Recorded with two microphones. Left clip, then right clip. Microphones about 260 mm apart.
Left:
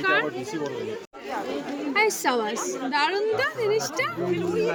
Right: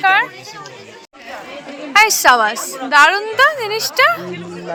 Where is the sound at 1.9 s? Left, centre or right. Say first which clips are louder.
Right 13 dB; centre.